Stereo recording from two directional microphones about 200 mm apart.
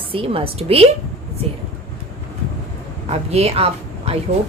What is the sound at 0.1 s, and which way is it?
Speech, 25° right (ahead or behind).